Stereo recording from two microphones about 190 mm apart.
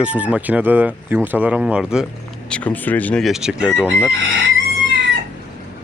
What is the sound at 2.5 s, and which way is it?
Speech, 5° left (ahead or behind).